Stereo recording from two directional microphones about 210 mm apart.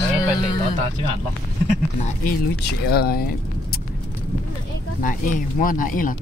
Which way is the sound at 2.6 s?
50° left (ahead or behind).